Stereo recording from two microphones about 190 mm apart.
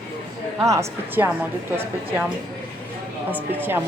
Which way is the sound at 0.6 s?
15° right (ahead or behind).